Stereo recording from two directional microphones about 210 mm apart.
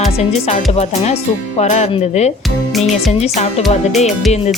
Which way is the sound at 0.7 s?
30° left (ahead or behind).